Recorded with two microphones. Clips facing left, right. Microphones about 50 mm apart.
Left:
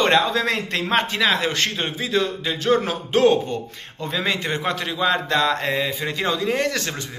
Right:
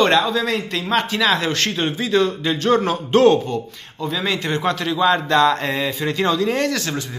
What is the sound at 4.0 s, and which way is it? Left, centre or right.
Speech, left.